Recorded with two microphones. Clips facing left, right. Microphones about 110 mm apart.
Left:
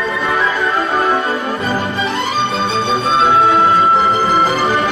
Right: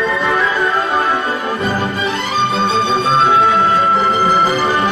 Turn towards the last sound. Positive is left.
turn(degrees=0)  # may be behind; listen again after turning